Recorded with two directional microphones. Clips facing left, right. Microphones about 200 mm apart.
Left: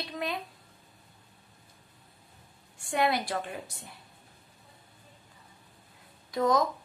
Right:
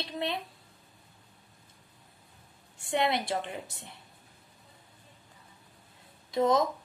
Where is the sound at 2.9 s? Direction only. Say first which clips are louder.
Even; 25° right (ahead or behind).